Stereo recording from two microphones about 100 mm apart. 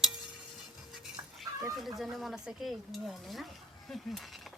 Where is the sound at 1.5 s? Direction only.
35° right (ahead or behind).